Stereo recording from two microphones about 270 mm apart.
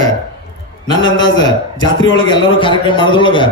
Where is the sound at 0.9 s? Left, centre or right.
Centre.